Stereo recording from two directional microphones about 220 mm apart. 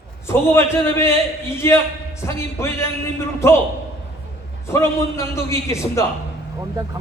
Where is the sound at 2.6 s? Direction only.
10° left (ahead or behind).